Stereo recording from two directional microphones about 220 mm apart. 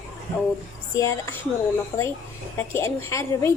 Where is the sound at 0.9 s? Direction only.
15° left (ahead or behind).